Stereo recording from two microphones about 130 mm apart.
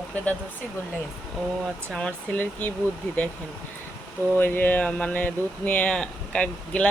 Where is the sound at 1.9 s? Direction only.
10° left (ahead or behind).